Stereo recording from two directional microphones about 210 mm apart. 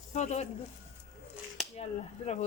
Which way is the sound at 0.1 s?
35° left (ahead or behind).